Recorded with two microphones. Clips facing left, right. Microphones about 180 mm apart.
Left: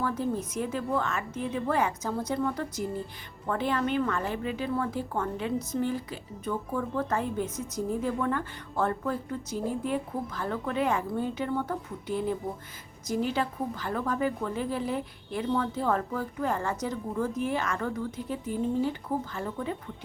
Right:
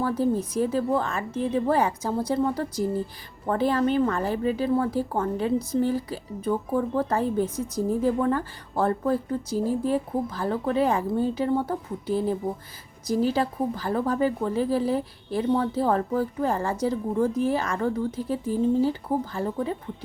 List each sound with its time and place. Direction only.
0.0 s a woman's voice: 35° right (ahead or behind)